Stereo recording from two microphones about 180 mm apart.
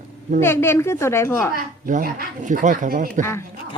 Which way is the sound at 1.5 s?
50° right (ahead or behind).